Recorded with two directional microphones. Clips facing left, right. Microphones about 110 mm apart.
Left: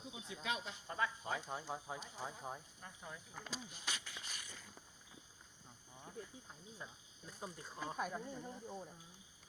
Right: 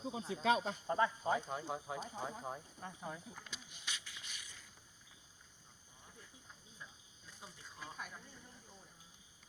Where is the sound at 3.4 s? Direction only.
40° left (ahead or behind).